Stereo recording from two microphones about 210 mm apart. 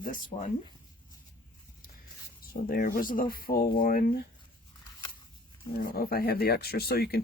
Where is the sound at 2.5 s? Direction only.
45° left (ahead or behind).